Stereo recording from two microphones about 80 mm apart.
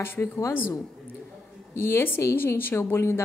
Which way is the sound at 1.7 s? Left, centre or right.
Left.